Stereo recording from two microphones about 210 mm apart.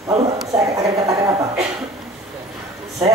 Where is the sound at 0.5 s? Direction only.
15° right (ahead or behind).